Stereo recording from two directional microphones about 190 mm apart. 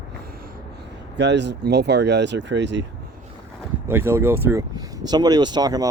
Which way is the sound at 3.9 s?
10° right (ahead or behind).